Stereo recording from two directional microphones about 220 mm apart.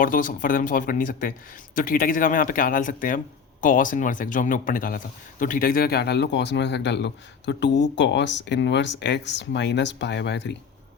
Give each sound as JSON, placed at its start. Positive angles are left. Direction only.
{"t": 0.0, "sound": "speech", "side_deg": 40}